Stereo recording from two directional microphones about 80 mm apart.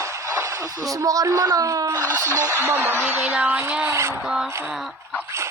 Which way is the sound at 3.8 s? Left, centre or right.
Right.